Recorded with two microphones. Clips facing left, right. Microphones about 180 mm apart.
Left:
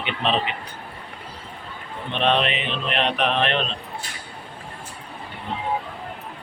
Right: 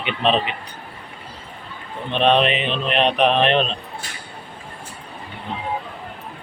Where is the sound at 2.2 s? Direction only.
20° right (ahead or behind).